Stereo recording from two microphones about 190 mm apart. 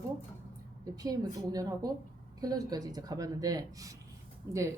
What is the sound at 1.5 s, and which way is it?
A woman's voice, 20° right (ahead or behind).